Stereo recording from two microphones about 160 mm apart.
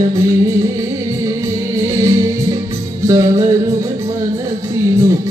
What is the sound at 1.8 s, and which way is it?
Music, 20° right (ahead or behind).